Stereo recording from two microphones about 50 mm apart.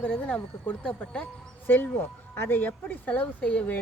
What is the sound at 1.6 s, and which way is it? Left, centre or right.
Speech, left.